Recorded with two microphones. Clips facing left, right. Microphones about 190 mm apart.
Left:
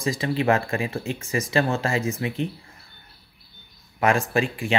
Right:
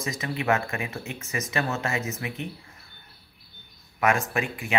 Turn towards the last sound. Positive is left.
turn(degrees=30)  # may be behind; listen again after turning